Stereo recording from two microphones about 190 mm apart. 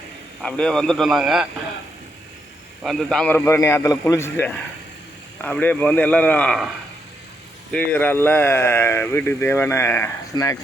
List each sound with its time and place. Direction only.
0.4 s a man's voice: 5° left (ahead or behind)
2.8 s speech: centre (ahead or behind)
7.7 s speech: 10° left (ahead or behind)